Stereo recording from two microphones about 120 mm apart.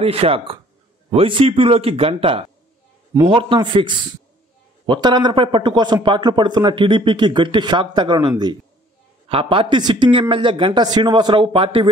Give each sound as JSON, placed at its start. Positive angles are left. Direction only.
{"t": 0.0, "sound": "speech", "side_deg": -55}
{"t": 9.3, "sound": "speech", "side_deg": -50}